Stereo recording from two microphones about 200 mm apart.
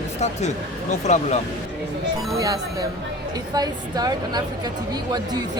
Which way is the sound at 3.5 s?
20° right (ahead or behind).